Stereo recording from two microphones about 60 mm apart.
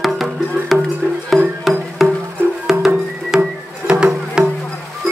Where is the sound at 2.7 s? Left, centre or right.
Right.